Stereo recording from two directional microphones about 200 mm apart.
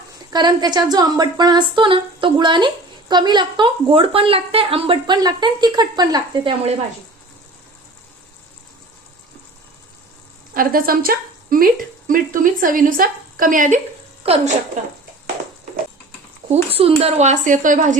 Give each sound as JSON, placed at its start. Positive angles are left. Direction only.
{"t": 0.3, "sound": "a woman's voice", "side_deg": -20}
{"t": 10.5, "sound": "speech", "side_deg": -45}
{"t": 16.5, "sound": "speech", "side_deg": -30}